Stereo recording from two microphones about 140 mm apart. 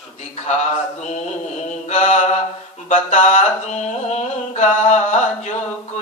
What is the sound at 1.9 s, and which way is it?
Mantra, 60° left (ahead or behind).